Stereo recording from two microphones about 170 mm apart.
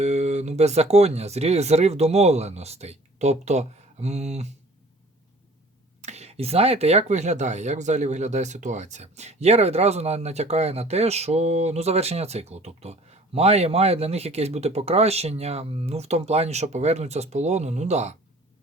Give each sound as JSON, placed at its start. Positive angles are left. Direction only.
{"t": 0.0, "sound": "speech", "side_deg": -40}
{"t": 6.0, "sound": "speech", "side_deg": -40}